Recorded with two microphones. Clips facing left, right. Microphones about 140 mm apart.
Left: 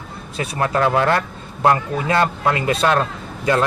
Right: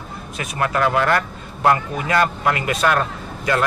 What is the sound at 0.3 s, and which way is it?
A man's voice, 30° left (ahead or behind).